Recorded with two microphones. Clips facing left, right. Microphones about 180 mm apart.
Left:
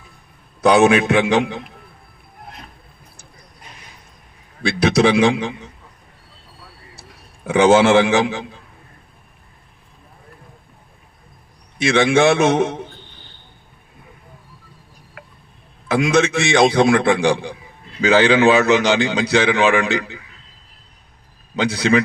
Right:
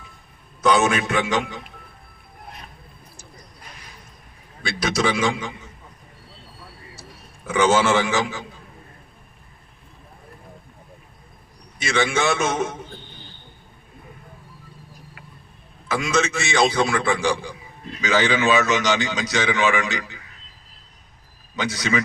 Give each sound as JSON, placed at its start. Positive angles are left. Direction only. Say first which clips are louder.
{"t": 0.6, "sound": "a man's voice", "louder": "left 6 dB", "side_deg": 60}
{"t": 4.6, "sound": "a man's voice", "louder": "left 7 dB", "side_deg": 60}
{"t": 7.4, "sound": "a man's voice", "louder": "left 6 dB", "side_deg": 60}
{"t": 11.9, "sound": "a man's voice", "louder": "left 7 dB", "side_deg": 60}
{"t": 15.9, "sound": "a man's voice", "louder": "left 6 dB", "side_deg": 60}
{"t": 21.5, "sound": "a man's voice", "louder": "left 7 dB", "side_deg": 60}